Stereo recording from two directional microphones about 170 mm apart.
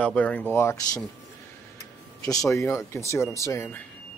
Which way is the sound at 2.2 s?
20° left (ahead or behind).